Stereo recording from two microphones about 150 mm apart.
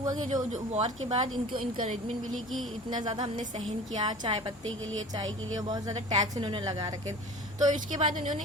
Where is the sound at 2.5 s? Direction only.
Centre (ahead or behind).